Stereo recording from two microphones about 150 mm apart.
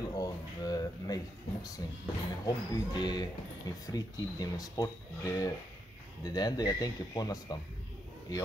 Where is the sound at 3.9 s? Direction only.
25° left (ahead or behind).